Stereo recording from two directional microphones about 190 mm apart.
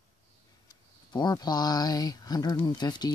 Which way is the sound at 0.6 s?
20° left (ahead or behind).